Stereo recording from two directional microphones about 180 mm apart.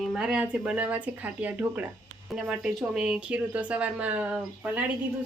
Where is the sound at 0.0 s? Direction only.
Centre (ahead or behind).